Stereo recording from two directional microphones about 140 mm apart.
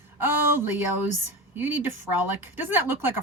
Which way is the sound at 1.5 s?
15° right (ahead or behind).